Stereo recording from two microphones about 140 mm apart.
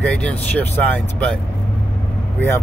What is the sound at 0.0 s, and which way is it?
Speech, 10° left (ahead or behind).